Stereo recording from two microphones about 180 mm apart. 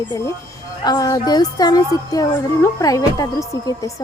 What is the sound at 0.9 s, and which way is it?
Speech, 20° left (ahead or behind).